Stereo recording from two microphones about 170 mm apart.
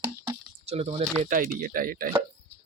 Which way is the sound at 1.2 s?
55° right (ahead or behind).